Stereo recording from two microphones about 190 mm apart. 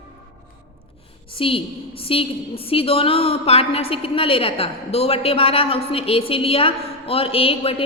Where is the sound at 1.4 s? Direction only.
30° left (ahead or behind).